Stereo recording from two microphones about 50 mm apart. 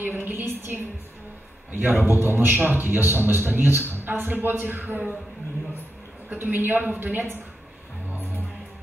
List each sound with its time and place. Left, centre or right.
0.0 s a woman's voice: right
1.7 s a man's voice: right
6.3 s a man's voice: right